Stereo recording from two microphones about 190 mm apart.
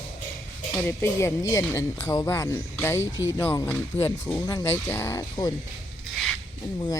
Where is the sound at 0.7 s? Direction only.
10° left (ahead or behind).